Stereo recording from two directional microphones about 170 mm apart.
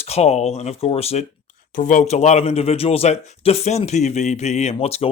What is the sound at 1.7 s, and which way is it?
A man's voice, 50° left (ahead or behind).